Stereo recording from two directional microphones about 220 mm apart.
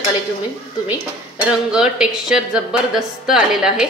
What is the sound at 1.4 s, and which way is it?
Speech, 5° right (ahead or behind).